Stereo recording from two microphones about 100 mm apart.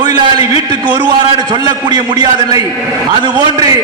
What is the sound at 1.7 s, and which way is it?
A man's voice, 45° right (ahead or behind).